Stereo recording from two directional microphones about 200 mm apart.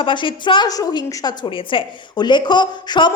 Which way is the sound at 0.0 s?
25° left (ahead or behind).